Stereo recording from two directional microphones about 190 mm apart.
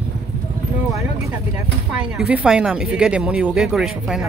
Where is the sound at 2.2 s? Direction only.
5° right (ahead or behind).